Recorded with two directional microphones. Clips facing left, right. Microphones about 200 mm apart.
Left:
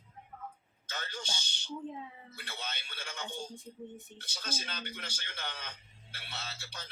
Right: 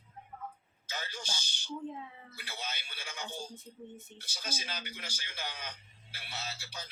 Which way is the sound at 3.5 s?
15° left (ahead or behind).